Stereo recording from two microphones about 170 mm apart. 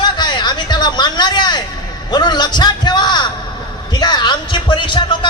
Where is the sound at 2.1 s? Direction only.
25° left (ahead or behind).